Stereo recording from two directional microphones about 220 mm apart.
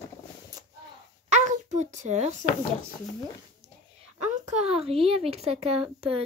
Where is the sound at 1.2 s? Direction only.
35° right (ahead or behind).